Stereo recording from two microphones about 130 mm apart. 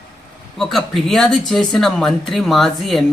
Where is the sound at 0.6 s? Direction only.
5° left (ahead or behind).